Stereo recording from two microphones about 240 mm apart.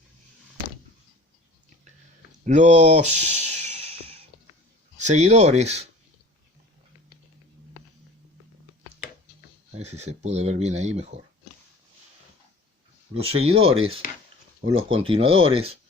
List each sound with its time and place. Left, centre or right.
2.4 s a sound: right
4.9 s speech: right
9.7 s speech: right
13.2 s speech: right